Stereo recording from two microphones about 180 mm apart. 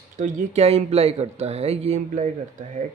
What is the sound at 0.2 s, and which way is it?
Speech, 45° right (ahead or behind).